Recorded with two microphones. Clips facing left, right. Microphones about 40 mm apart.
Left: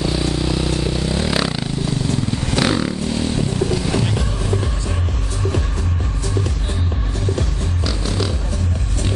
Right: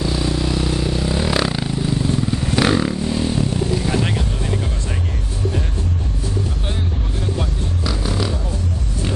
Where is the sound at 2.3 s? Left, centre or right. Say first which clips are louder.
Right 1 dB; centre.